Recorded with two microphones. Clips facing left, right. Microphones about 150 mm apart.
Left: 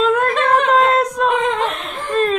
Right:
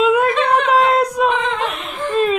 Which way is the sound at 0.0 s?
10° right (ahead or behind).